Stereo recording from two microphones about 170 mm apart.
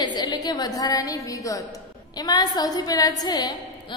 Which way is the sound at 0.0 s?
25° left (ahead or behind).